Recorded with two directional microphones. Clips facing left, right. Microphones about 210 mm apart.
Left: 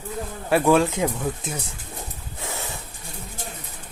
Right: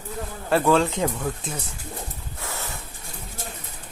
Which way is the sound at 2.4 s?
20° left (ahead or behind).